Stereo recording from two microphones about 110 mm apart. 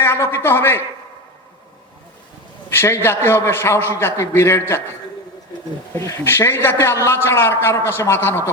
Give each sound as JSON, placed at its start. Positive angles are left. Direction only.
{"t": 0.0, "sound": "a sound", "side_deg": 25}
{"t": 2.6, "sound": "a man's voice", "side_deg": 25}
{"t": 6.0, "sound": "a man's voice", "side_deg": 25}